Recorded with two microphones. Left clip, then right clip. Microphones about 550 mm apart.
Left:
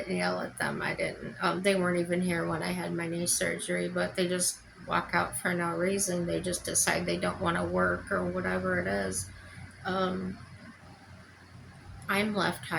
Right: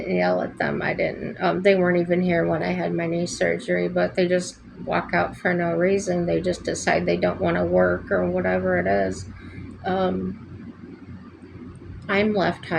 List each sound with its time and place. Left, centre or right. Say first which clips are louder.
0.1 s speech: right 11 dB; left
12.0 s speech: right 8 dB; left